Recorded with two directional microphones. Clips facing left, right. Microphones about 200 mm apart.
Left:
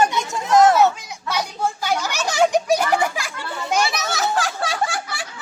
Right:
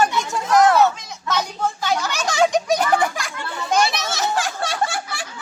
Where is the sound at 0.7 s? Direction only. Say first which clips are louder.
Even; 10° left (ahead or behind).